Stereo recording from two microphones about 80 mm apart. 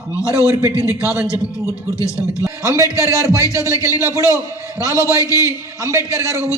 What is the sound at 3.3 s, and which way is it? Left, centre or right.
Speech, left.